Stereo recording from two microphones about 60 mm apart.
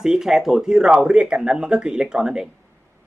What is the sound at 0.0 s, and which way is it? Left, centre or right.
Speech, centre.